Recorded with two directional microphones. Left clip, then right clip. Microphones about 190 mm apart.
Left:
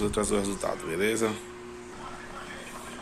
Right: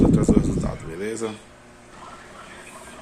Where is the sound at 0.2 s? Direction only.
10° right (ahead or behind).